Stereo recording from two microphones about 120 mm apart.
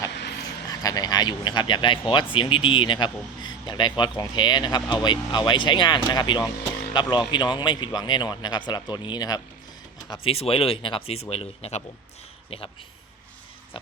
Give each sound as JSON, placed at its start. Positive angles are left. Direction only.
{"t": 0.0, "sound": "speech", "side_deg": 30}
{"t": 10.2, "sound": "speech", "side_deg": 55}